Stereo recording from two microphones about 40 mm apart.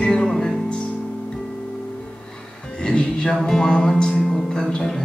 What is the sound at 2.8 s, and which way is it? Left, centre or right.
Music, left.